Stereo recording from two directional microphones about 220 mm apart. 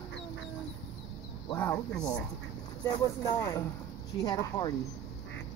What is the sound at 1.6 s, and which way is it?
Speech, 5° left (ahead or behind).